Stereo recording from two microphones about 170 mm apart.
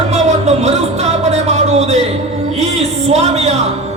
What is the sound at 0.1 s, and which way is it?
Music, 40° right (ahead or behind).